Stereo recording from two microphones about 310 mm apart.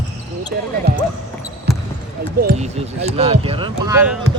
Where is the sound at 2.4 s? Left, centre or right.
Right; by 4.2 s centre.